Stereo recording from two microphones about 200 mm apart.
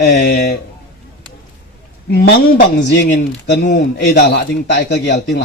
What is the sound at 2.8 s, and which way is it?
A man's voice, 60° left (ahead or behind).